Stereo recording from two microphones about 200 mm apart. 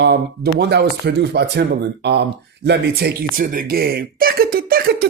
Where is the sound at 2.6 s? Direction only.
55° right (ahead or behind).